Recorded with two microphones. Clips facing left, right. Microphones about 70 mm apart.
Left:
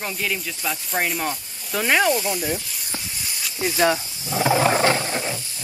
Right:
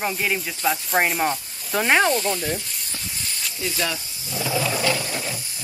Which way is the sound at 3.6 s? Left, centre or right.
Left.